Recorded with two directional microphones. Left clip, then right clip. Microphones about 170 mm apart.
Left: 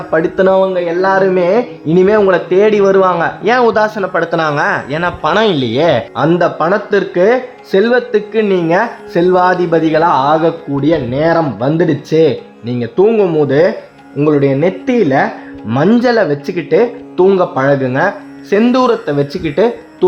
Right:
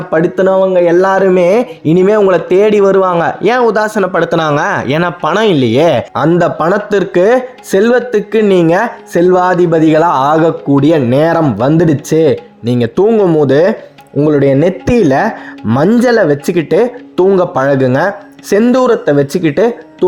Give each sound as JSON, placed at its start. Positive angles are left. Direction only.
{"t": 0.1, "sound": "speech", "side_deg": -30}
{"t": 0.4, "sound": "speech", "side_deg": -10}
{"t": 0.9, "sound": "speech", "side_deg": -40}
{"t": 3.6, "sound": "speech", "side_deg": -20}
{"t": 4.1, "sound": "speech", "side_deg": -40}
{"t": 13.4, "sound": "speech", "side_deg": -35}
{"t": 15.9, "sound": "speech", "side_deg": -25}
{"t": 18.6, "sound": "speech", "side_deg": -25}